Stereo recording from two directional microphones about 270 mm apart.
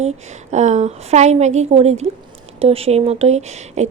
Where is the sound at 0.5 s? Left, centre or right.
Right.